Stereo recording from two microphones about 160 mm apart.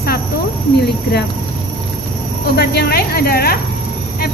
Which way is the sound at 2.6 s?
85° left.